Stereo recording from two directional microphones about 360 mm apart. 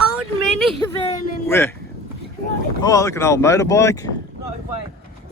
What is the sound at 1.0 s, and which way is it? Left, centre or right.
Speech, centre.